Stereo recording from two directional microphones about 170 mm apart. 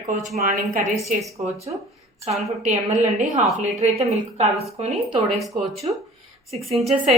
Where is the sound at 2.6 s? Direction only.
45° right (ahead or behind).